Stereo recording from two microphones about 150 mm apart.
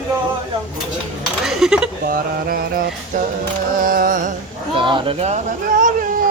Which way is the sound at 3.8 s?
70° right (ahead or behind).